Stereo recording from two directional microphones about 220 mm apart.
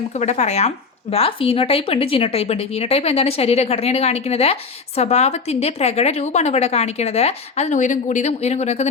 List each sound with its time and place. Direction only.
0.2 s a woman's voice: 30° left (ahead or behind)